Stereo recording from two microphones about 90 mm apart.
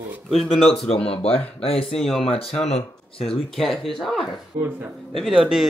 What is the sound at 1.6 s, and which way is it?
Speech, 90° left.